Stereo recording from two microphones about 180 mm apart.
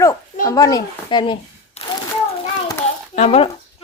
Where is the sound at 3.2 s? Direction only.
35° left (ahead or behind).